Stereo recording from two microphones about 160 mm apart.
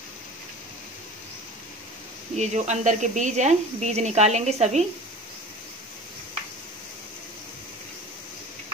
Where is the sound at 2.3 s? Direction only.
45° right (ahead or behind).